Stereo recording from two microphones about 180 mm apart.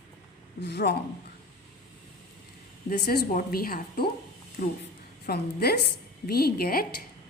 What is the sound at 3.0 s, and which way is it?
A woman's voice, 60° left (ahead or behind).